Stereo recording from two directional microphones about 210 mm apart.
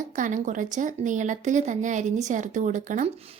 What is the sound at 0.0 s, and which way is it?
Speech, 40° right (ahead or behind).